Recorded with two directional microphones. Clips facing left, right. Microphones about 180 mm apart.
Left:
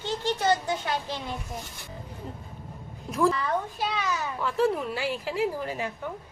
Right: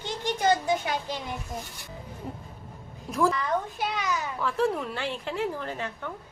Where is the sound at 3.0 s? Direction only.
Centre (ahead or behind).